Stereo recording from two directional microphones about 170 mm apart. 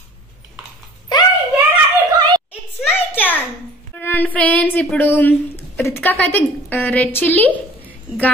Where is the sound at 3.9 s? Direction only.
10° left (ahead or behind).